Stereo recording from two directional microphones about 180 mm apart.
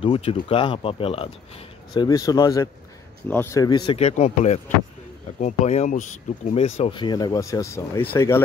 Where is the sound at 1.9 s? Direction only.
20° left (ahead or behind).